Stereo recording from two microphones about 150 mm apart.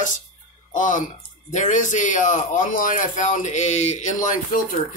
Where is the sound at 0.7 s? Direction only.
60° left (ahead or behind).